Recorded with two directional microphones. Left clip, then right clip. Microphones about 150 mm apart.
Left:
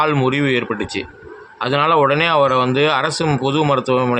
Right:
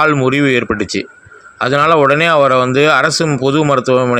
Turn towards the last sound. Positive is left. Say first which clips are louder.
# right 4 dB
turn(degrees=-25)  # may be behind; listen again after turning